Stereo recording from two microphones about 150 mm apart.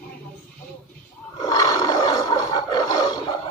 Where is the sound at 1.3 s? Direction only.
25° left (ahead or behind).